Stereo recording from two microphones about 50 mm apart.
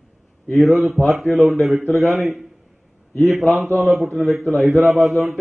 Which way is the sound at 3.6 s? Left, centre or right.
Right.